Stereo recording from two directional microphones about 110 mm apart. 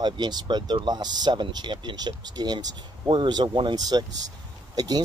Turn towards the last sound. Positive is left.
turn(degrees=-35)  # may be behind; listen again after turning